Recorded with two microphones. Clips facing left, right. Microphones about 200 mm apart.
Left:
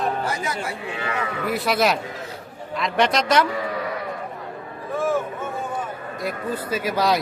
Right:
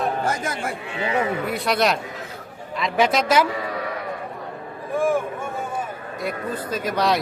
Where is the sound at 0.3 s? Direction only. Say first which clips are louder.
Right 2 dB; 50° right (ahead or behind).